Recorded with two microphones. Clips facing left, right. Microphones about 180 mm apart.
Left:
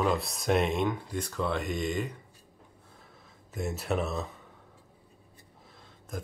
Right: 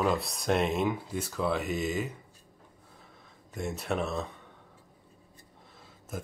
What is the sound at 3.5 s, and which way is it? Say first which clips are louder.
Speech: left 1 dB; centre (ahead or behind).